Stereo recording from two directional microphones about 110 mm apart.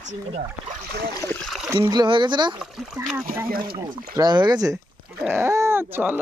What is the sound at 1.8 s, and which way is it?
Speech, 45° right (ahead or behind).